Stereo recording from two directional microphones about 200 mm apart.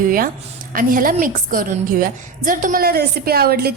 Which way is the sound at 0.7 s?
45° right (ahead or behind).